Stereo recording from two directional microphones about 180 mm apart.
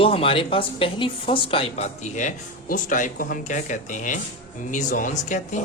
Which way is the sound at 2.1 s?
45° left (ahead or behind).